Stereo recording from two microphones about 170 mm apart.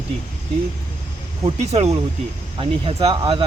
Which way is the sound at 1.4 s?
40° right (ahead or behind).